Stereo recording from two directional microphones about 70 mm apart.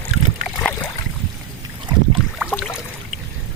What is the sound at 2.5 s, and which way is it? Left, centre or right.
Boat, centre.